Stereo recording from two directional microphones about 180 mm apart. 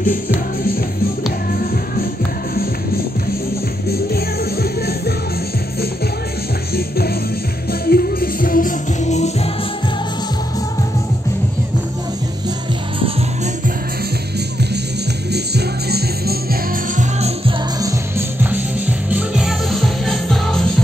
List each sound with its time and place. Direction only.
4.1 s music: 60° left (ahead or behind)
7.8 s music: 55° left (ahead or behind); by 9.3 s 40° left (ahead or behind)
15.3 s music: 65° right (ahead or behind)
18.4 s music: 10° right (ahead or behind)